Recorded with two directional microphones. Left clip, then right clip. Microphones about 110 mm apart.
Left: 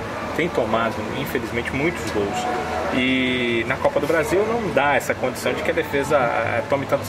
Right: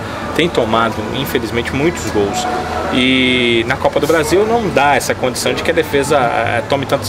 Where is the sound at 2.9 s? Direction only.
45° right (ahead or behind).